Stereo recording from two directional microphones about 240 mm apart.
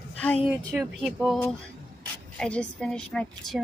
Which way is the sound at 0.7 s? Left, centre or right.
Centre.